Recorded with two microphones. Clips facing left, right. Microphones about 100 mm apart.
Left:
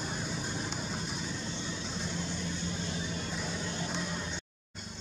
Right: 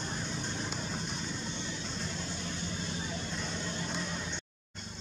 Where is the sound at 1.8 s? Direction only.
5° left (ahead or behind).